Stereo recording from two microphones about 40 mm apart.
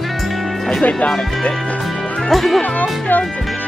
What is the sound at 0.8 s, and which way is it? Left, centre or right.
Speech, left.